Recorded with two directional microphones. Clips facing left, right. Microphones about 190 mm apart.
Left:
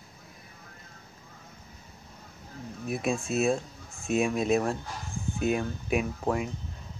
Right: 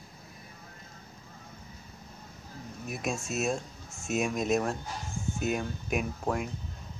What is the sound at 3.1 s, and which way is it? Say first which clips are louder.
Speech: left 5 dB; 45° right (ahead or behind).